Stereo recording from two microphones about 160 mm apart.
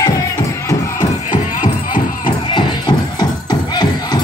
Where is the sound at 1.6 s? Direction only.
55° left (ahead or behind).